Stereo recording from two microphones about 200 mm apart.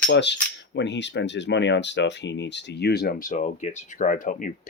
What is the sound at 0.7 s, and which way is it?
Speech, 60° left (ahead or behind).